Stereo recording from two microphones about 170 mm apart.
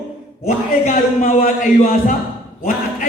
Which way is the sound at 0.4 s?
45° left (ahead or behind).